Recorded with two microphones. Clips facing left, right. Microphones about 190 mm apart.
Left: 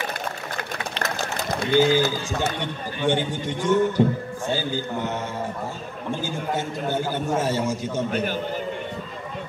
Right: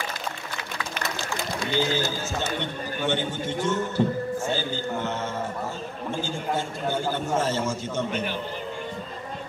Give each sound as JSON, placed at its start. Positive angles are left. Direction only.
{"t": 0.9, "sound": "a sound", "side_deg": 40}
{"t": 1.6, "sound": "speech", "side_deg": 60}
{"t": 3.1, "sound": "a man's voice", "side_deg": 15}
{"t": 6.2, "sound": "a man's voice", "side_deg": 15}
{"t": 8.1, "sound": "a man's voice", "side_deg": 45}